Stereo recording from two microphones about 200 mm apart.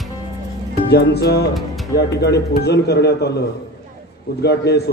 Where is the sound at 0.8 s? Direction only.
55° left (ahead or behind).